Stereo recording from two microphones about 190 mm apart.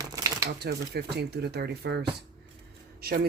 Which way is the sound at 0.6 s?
60° right (ahead or behind).